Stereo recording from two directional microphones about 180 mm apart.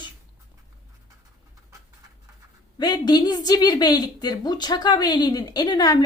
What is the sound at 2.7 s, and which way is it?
A woman's voice, 25° left (ahead or behind).